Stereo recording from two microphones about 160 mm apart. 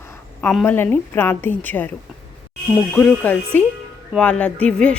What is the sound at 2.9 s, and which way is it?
A woman's voice, 10° left (ahead or behind).